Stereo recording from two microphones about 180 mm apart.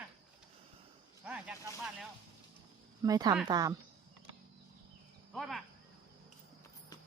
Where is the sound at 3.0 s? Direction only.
20° right (ahead or behind).